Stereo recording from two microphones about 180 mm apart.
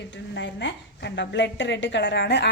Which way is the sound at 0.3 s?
75° left (ahead or behind).